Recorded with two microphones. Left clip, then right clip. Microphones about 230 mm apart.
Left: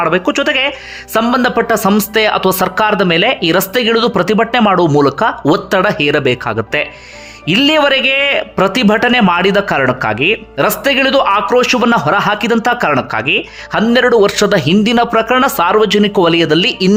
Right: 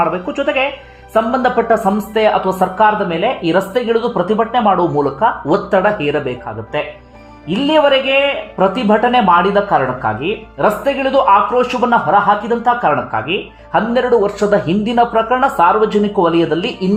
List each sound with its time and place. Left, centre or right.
0.0 s speech: centre